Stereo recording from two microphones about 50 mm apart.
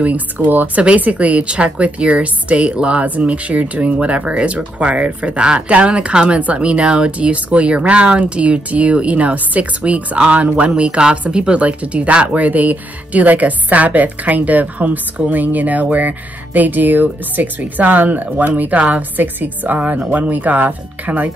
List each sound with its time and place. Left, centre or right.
0.4 s speech: right
0.8 s a woman's voice: right